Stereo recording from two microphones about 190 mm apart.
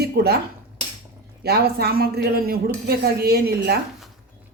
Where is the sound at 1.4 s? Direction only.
55° right (ahead or behind).